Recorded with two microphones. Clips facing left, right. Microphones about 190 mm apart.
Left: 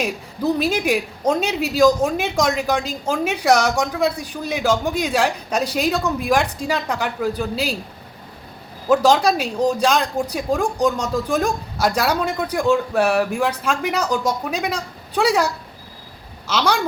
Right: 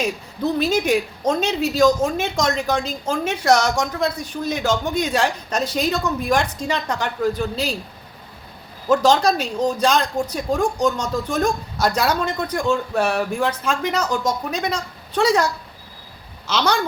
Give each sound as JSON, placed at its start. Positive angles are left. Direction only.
{"t": 0.6, "sound": "speech", "side_deg": 5}
{"t": 8.9, "sound": "speech", "side_deg": 5}
{"t": 16.5, "sound": "speech", "side_deg": 5}